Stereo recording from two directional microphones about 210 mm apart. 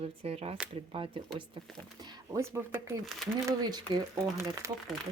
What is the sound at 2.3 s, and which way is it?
Speech, 15° right (ahead or behind).